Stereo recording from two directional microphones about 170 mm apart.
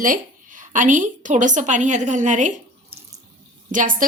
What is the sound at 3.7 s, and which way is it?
Speech, 50° right (ahead or behind).